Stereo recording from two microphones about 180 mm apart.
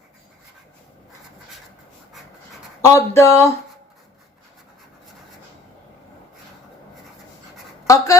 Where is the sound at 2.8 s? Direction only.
15° left (ahead or behind).